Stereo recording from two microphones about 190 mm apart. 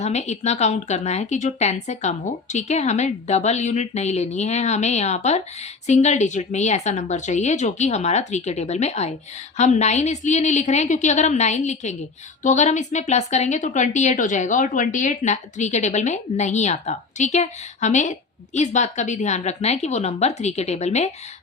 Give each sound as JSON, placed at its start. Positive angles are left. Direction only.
{"t": 0.0, "sound": "speech", "side_deg": 35}